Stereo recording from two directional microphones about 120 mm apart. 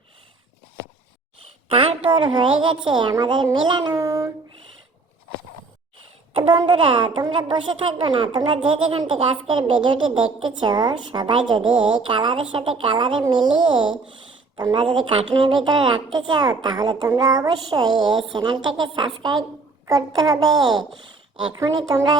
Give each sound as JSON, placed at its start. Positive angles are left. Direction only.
{"t": 1.4, "sound": "a woman's voice", "side_deg": -55}
{"t": 3.9, "sound": "child singing", "side_deg": -25}
{"t": 6.3, "sound": "a woman's voice", "side_deg": -45}
{"t": 13.8, "sound": "speech", "side_deg": -5}
{"t": 14.5, "sound": "a woman's voice", "side_deg": -35}
{"t": 18.3, "sound": "a woman's voice", "side_deg": -40}